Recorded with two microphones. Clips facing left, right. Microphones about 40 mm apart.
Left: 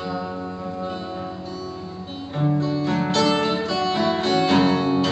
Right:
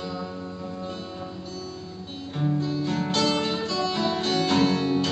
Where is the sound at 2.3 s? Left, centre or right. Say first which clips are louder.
Left 4 dB; centre.